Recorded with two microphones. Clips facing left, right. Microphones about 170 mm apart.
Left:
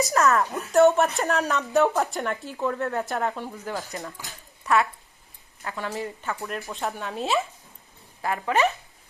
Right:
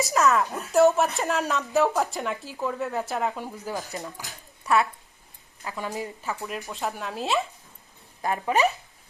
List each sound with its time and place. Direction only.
0.0 s speech: centre (ahead or behind)
3.4 s speech: 15° right (ahead or behind)
4.3 s a sound: 15° right (ahead or behind)
5.7 s speech: 15° right (ahead or behind)
6.2 s speech: centre (ahead or behind)
8.2 s speech: 20° right (ahead or behind)